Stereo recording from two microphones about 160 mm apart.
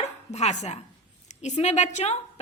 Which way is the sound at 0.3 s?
45° left (ahead or behind).